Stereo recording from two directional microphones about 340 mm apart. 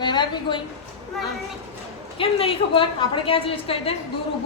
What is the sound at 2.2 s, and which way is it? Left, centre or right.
A woman's voice, centre.